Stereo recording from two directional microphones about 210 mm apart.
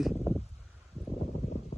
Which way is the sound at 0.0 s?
5° right (ahead or behind).